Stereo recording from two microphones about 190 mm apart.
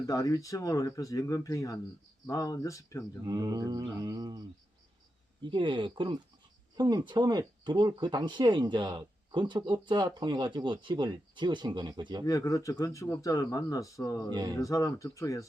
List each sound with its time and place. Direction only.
0.0 s speech: 20° left (ahead or behind)
3.2 s speech: 20° right (ahead or behind)
12.2 s speech: 15° left (ahead or behind)
14.3 s speech: 25° right (ahead or behind)
14.6 s speech: 15° left (ahead or behind)